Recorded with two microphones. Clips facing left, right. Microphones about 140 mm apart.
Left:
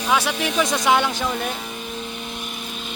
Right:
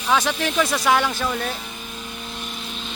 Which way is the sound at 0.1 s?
10° left (ahead or behind).